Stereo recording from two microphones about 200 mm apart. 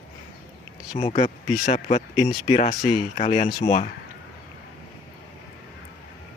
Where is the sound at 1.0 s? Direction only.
35° left (ahead or behind).